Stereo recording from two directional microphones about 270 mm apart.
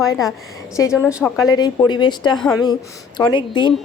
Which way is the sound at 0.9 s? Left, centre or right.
Centre.